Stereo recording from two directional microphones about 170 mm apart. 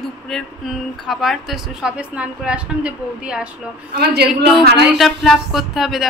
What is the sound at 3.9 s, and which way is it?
Speech, 70° right (ahead or behind).